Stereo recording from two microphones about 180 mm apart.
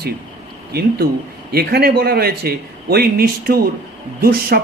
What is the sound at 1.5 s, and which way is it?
A man's voice, 60° right (ahead or behind).